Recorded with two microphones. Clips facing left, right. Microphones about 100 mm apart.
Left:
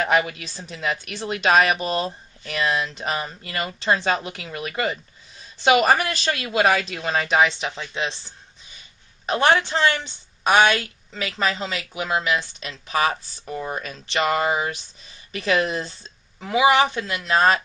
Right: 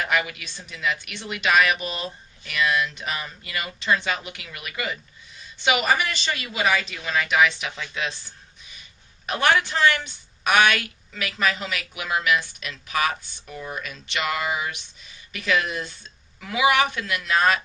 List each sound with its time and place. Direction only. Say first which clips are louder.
0.0 s a woman's voice: left 4 dB; 35° left (ahead or behind)
6.3 s speech: left 5 dB; 65° left (ahead or behind)
6.7 s a woman's voice: left 2 dB; 40° left (ahead or behind)